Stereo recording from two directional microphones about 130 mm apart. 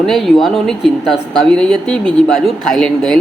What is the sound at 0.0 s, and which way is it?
Speech, centre (ahead or behind).